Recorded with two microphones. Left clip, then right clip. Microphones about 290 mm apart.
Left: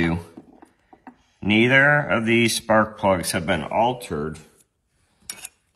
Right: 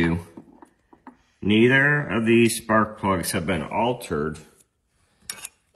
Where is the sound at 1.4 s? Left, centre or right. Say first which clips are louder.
Left 2 dB; centre.